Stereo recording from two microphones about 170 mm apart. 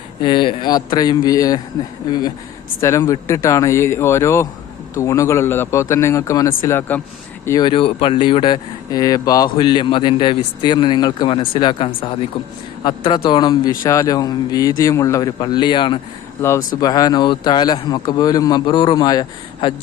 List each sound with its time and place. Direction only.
0.2 s speech: 30° left (ahead or behind)
7.7 s speech: 35° left (ahead or behind)